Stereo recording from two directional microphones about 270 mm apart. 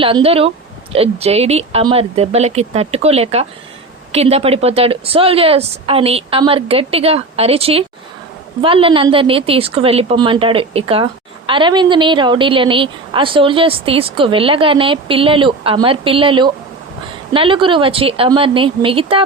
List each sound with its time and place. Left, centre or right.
0.0 s a woman's voice: right